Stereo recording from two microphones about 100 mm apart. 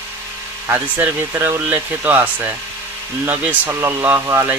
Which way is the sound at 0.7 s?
20° right (ahead or behind).